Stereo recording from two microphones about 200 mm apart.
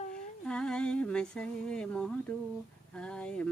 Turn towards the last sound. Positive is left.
turn(degrees=5)  # may be behind; listen again after turning